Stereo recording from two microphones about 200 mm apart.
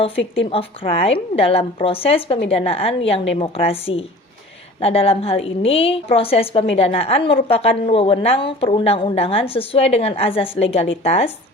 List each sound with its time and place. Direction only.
0.0 s a woman's voice: 30° left (ahead or behind)